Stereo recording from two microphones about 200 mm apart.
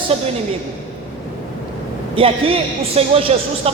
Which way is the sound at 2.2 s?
30° right (ahead or behind).